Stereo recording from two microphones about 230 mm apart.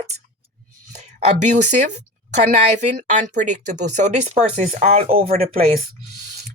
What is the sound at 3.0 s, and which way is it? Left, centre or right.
Speech, right.